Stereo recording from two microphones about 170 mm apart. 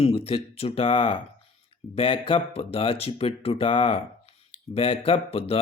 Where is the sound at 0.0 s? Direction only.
35° left (ahead or behind).